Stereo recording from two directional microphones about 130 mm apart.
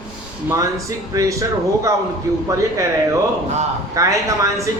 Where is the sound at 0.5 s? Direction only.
25° right (ahead or behind).